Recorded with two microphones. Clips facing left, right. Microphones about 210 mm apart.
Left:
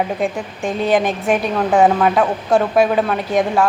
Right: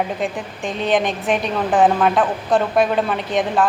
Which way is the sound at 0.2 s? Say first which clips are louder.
Left 3 dB; centre (ahead or behind).